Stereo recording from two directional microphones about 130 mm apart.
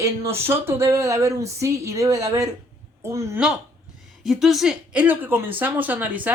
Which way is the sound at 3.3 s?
5° right (ahead or behind).